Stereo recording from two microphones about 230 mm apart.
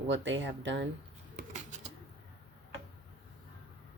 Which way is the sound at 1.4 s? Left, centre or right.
Right.